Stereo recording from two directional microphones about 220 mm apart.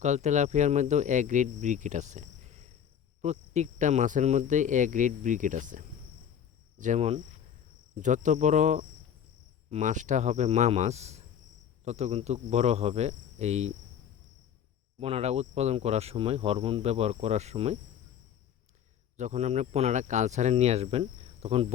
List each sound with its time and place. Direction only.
0.0 s speech: 30° right (ahead or behind)
15.0 s speech: 30° right (ahead or behind)
19.1 s speech: 30° right (ahead or behind)